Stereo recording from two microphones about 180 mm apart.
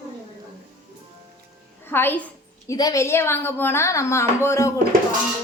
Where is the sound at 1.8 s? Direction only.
10° left (ahead or behind).